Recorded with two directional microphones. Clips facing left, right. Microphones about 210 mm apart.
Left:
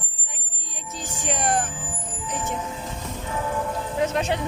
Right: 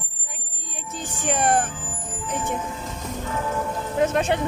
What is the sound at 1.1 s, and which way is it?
Music, 55° right (ahead or behind).